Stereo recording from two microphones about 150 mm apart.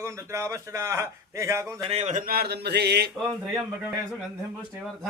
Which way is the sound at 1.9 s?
50° right (ahead or behind).